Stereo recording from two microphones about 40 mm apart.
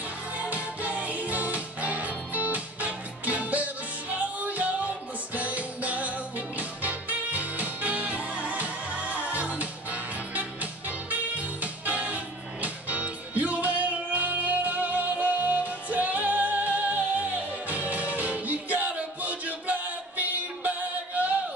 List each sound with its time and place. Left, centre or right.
0.4 s music: right